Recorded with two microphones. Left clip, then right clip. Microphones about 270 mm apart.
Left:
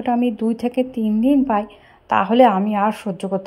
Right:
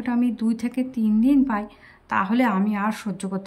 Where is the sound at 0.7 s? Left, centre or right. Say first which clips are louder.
Left 6 dB; right.